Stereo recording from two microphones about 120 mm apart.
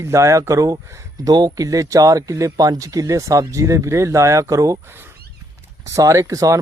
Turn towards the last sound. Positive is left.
turn(degrees=-30)  # may be behind; listen again after turning